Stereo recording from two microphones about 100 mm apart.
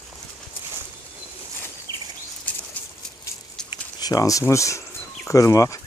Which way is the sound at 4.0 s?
40° left (ahead or behind).